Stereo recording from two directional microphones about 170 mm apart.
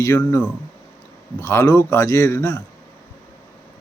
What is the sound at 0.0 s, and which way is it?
A man's voice, 15° left (ahead or behind).